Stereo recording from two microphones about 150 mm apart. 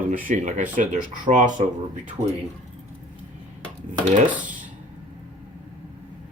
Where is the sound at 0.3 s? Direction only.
55° right (ahead or behind).